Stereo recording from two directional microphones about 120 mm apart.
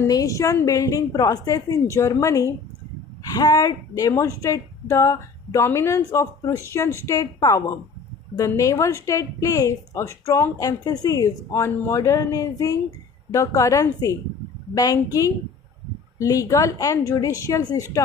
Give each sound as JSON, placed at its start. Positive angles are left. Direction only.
{"t": 0.0, "sound": "a woman's voice", "side_deg": 30}
{"t": 16.2, "sound": "speech", "side_deg": 25}